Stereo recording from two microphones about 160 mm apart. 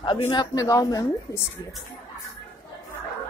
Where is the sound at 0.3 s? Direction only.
25° left (ahead or behind).